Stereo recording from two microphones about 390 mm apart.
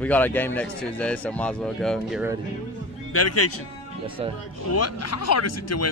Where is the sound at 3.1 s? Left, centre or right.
Left.